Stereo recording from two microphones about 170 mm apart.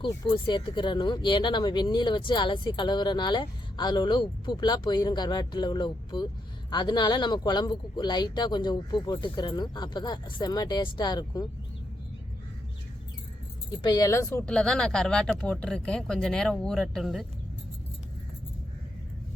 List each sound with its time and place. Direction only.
0.0 s speech: 25° left (ahead or behind)
13.7 s speech: 25° left (ahead or behind); by 17.2 s centre (ahead or behind)